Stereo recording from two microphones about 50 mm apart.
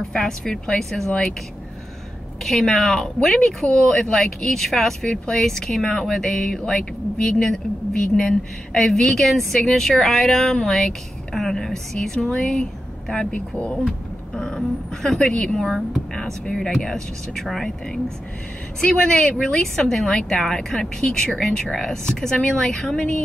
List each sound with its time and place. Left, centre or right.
0.1 s speech: centre
2.4 s speech: centre
13.3 s speech: left
13.8 s speech: centre
18.8 s speech: centre